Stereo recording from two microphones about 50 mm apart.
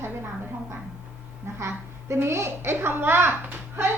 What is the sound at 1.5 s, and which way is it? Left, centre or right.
A woman's voice, right.